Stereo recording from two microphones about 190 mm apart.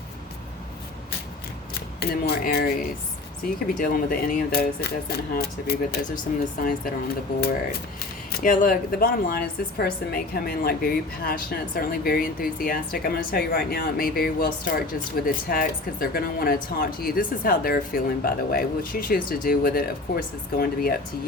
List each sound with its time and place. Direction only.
2.0 s a woman's voice: 55° left (ahead or behind)
8.3 s a woman's voice: 45° left (ahead or behind)